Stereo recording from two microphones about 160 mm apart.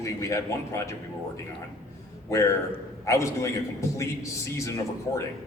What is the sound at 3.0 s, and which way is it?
A man's voice, 20° left (ahead or behind).